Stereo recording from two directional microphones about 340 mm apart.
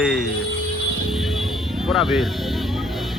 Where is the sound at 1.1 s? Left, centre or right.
Centre.